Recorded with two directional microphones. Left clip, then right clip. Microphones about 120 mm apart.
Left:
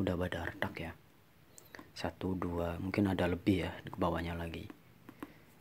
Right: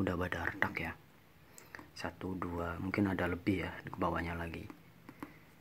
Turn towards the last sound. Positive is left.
turn(degrees=25)  # may be behind; listen again after turning